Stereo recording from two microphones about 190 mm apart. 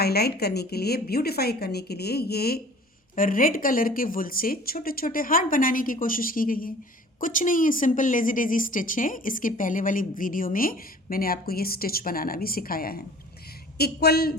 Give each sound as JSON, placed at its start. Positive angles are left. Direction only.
{"t": 0.0, "sound": "a woman's voice", "side_deg": 55}